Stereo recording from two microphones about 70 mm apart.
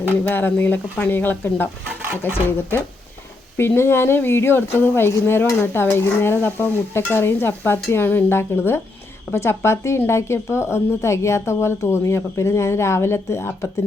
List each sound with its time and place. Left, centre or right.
0.3 s speech: left